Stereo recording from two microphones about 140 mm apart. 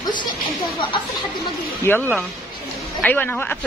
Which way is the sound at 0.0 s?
30° left (ahead or behind).